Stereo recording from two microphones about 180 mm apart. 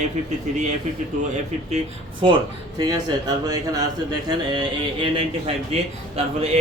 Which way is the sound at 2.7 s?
20° right (ahead or behind).